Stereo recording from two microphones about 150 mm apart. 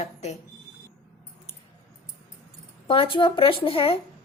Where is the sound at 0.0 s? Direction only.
45° left (ahead or behind).